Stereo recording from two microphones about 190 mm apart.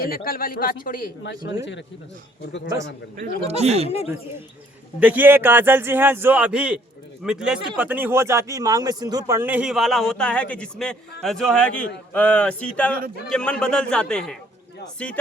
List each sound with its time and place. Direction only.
0.0 s speech: 50° left (ahead or behind)
1.2 s speech: 70° left (ahead or behind)
3.4 s speech: 35° right (ahead or behind)
3.8 s speech: 30° left (ahead or behind)
4.9 s a man's voice: 10° right (ahead or behind)